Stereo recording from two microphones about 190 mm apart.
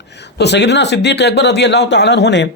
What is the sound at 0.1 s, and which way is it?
Speech, 60° left (ahead or behind).